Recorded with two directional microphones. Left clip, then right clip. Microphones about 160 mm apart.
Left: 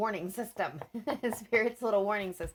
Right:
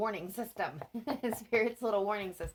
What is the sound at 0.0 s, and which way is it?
Speech, 40° left (ahead or behind).